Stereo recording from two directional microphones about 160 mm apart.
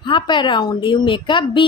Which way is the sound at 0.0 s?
30° left (ahead or behind).